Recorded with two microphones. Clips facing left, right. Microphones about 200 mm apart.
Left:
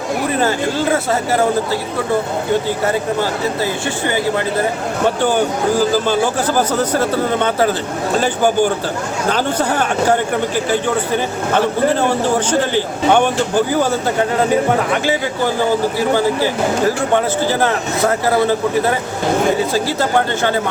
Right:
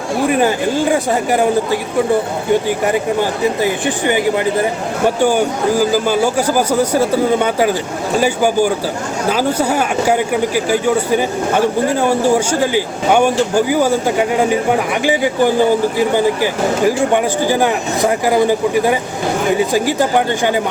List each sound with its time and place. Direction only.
0.3 s speech: 15° right (ahead or behind)